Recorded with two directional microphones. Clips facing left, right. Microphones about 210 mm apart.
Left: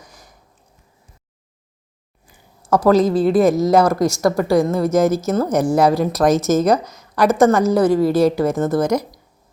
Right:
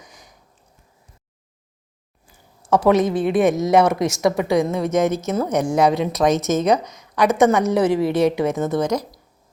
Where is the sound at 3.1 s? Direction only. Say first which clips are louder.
Left 3 dB; centre (ahead or behind).